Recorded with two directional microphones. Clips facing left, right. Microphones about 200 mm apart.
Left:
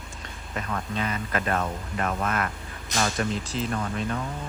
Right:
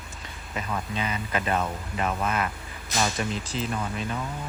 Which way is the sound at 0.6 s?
5° right (ahead or behind).